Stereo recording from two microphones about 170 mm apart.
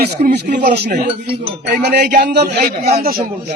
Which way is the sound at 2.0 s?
50° right (ahead or behind).